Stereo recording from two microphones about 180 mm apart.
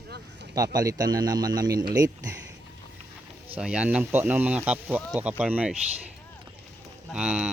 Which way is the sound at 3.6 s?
5° right (ahead or behind).